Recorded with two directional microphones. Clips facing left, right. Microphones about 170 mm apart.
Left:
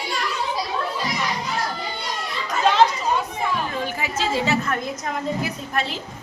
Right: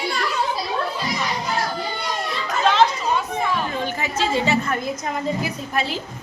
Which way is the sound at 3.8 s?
10° left (ahead or behind).